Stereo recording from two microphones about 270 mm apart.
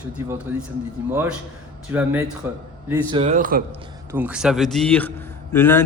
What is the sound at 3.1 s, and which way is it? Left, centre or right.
Speech, right.